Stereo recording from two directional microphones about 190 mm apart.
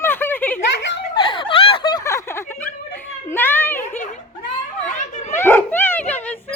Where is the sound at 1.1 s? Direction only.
25° left (ahead or behind).